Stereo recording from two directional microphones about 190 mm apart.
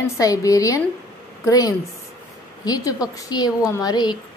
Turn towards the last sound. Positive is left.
turn(degrees=20)  # may be behind; listen again after turning